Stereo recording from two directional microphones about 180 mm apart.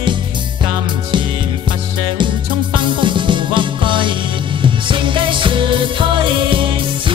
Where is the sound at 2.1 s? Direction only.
25° right (ahead or behind).